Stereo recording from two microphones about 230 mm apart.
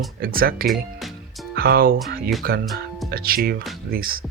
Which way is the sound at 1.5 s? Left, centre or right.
Right.